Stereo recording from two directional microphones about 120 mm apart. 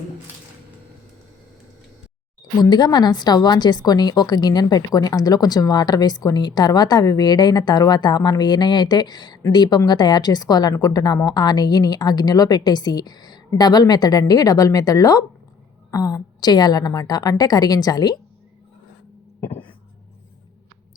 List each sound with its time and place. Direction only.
2.6 s a woman's voice: 35° left (ahead or behind)